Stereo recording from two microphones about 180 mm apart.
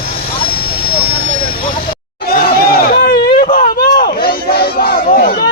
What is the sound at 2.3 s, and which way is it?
Crowd, 55° left (ahead or behind).